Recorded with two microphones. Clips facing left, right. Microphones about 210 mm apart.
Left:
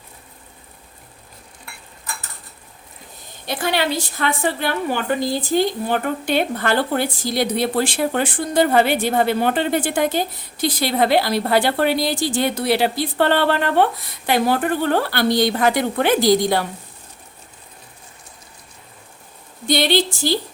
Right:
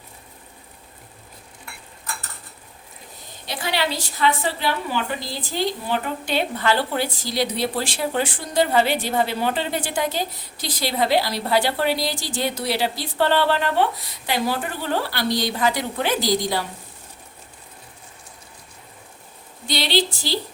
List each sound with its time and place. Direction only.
3.4 s a woman's voice: 50° left (ahead or behind)
19.6 s a woman's voice: 50° left (ahead or behind)